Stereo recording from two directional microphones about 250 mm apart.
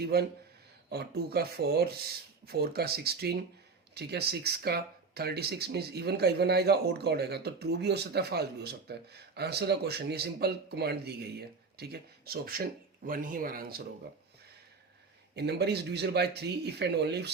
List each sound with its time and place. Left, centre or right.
0.0 s speech: right
15.4 s speech: right